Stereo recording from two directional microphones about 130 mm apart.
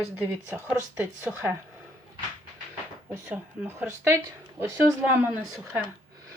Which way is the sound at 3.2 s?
15° right (ahead or behind).